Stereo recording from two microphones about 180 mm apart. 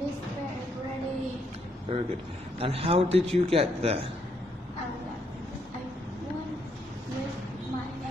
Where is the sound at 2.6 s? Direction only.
30° right (ahead or behind).